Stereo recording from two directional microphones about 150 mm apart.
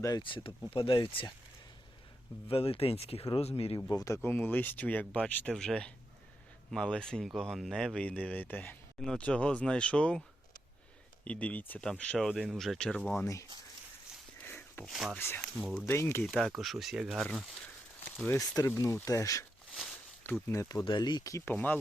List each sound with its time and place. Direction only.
0.0 s speech: 30° left (ahead or behind)
2.5 s speech: 40° left (ahead or behind)
3.8 s speech: 25° left (ahead or behind); by 10.2 s 5° left (ahead or behind)
11.3 s speech: 10° left (ahead or behind)
14.4 s a sound: 15° left (ahead or behind)
14.8 s speech: centre (ahead or behind)
15.2 s speech: 15° left (ahead or behind)
15.5 s speech: centre (ahead or behind)
15.9 s speech: 15° left (ahead or behind)
16.2 s speech: centre (ahead or behind)
18.3 s speech: 25° left (ahead or behind)
20.5 s speech: 20° left (ahead or behind)